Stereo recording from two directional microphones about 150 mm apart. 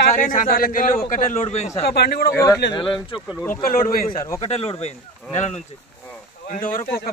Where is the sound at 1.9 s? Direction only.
90° left.